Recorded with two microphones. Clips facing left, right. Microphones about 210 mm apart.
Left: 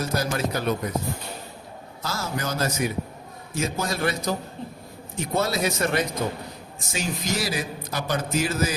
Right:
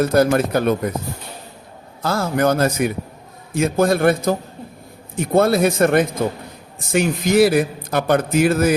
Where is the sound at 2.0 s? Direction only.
55° right (ahead or behind).